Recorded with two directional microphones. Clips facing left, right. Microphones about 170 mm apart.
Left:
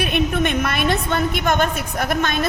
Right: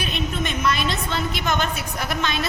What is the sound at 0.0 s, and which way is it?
A woman's voice, 60° left (ahead or behind).